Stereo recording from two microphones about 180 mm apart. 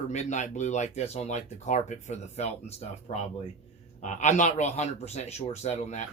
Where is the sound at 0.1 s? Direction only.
40° left (ahead or behind).